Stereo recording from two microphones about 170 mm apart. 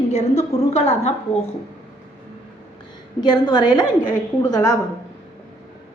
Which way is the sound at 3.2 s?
25° left (ahead or behind).